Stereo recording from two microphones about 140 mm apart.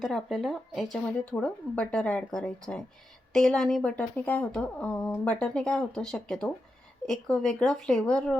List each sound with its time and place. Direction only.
0.0 s speech: centre (ahead or behind)